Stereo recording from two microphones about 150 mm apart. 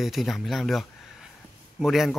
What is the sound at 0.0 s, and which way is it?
Speech, centre (ahead or behind).